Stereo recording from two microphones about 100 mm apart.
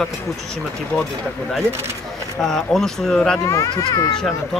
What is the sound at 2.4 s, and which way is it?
Speech, 5° left (ahead or behind).